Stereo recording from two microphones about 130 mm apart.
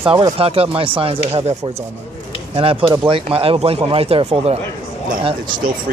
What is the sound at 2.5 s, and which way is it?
Speech, 45° right (ahead or behind).